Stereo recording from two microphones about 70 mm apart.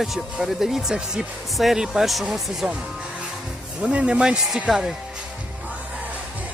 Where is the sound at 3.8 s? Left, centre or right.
Centre.